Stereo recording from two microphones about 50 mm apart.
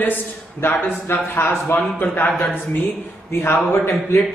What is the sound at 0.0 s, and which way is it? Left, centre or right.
A man's voice, left.